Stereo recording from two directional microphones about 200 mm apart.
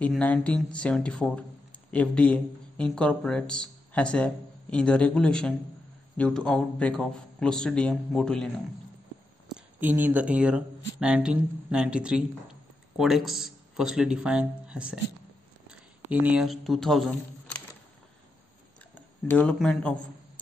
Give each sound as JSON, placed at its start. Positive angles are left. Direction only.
{"t": 0.0, "sound": "speech", "side_deg": 5}
{"t": 9.8, "sound": "speech", "side_deg": -10}
{"t": 18.9, "sound": "speech", "side_deg": 5}